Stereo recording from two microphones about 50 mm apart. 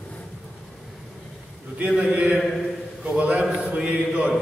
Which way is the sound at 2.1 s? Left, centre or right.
Right.